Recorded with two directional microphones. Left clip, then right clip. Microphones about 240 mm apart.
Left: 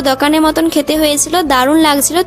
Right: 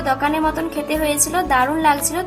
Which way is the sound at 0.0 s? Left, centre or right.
Left.